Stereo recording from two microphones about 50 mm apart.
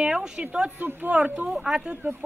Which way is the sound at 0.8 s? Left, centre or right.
Right.